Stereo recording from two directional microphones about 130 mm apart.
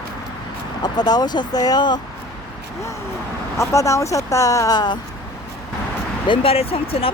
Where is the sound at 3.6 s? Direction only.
25° left (ahead or behind).